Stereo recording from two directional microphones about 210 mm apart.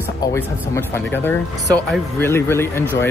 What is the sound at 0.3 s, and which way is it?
Speech, 10° left (ahead or behind).